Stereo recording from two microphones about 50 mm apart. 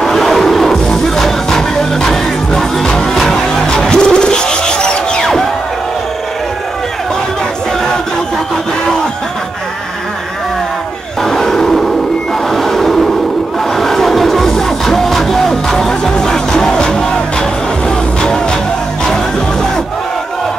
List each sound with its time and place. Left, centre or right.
0.0 s music: centre
11.2 s roar: centre
12.4 s a sound: centre
13.7 s music: centre